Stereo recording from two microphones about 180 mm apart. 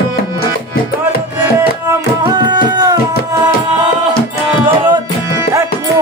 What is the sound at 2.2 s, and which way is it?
Music, 25° right (ahead or behind).